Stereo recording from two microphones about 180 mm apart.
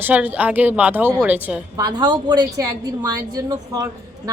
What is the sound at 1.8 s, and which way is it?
A woman's voice, 20° right (ahead or behind).